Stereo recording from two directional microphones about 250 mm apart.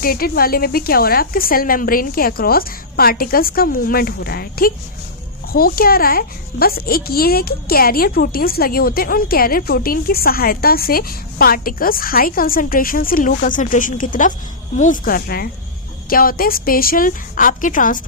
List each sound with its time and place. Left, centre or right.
0.0 s a woman's voice: left